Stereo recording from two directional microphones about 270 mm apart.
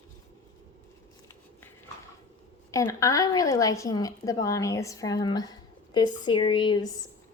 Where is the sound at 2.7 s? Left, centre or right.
Centre.